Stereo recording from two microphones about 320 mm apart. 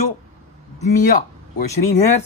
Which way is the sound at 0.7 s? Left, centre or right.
Left.